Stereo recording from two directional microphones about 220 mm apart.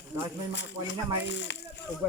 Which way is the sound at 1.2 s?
55° left (ahead or behind).